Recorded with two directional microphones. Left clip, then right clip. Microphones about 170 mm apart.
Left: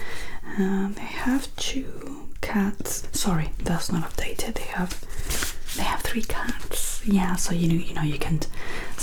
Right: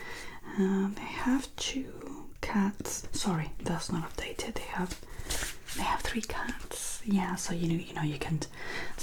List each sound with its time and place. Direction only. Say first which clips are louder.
0.1 s speech: left 6 dB; 30° right (ahead or behind)